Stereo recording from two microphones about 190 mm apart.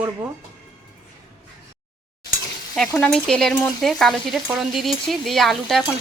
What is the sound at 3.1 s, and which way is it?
Stir, centre (ahead or behind).